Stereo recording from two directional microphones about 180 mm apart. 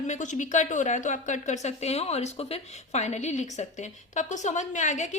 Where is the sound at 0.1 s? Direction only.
45° left (ahead or behind).